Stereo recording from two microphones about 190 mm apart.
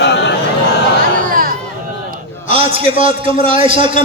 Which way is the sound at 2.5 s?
30° right (ahead or behind).